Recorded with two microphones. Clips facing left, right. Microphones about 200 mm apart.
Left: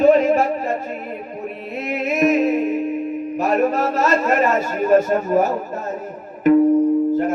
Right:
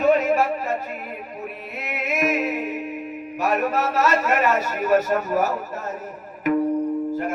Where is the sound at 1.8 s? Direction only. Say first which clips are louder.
Left 6 dB; 30° left (ahead or behind).